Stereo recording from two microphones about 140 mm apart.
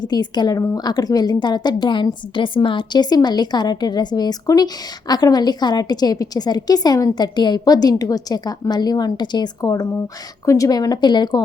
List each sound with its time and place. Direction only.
0.0 s a woman's voice: 30° left (ahead or behind)